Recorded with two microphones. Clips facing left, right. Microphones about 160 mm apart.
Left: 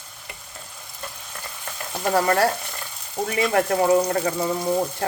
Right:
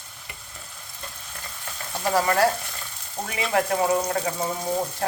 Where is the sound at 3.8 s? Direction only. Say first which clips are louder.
Left 4 dB; 30° left (ahead or behind).